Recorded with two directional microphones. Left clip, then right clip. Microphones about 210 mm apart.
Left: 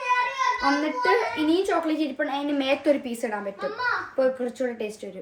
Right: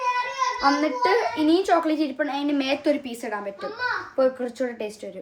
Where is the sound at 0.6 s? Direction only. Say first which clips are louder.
Right 3 dB; 5° right (ahead or behind).